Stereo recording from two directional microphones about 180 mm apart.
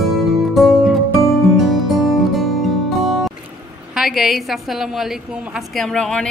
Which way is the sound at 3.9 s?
Centre (ahead or behind).